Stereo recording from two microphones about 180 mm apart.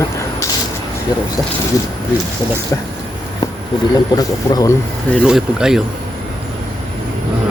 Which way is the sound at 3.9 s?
20° left (ahead or behind).